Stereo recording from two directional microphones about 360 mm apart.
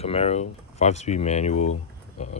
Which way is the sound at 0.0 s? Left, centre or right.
Centre.